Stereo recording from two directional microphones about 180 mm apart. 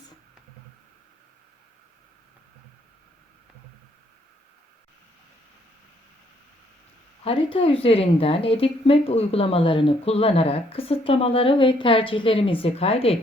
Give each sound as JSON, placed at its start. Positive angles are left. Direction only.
{"t": 7.3, "sound": "a woman's voice", "side_deg": 30}